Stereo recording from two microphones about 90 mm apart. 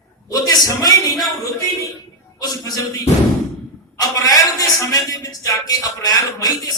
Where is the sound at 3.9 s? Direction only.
40° left (ahead or behind).